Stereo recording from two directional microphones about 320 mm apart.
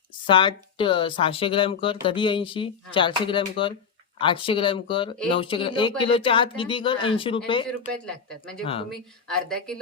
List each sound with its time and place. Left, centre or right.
0.3 s speech: centre
8.0 s speech: centre